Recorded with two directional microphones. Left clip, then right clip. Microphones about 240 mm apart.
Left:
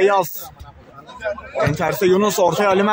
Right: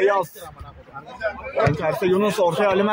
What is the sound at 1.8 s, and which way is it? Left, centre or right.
Speech, left.